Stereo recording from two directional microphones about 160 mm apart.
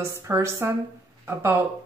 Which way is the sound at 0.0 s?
15° right (ahead or behind).